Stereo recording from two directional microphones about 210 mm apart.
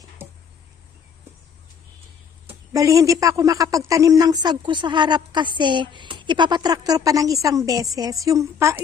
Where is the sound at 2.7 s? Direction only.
15° right (ahead or behind).